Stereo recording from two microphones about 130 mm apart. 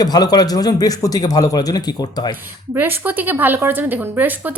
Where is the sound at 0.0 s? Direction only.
30° left (ahead or behind).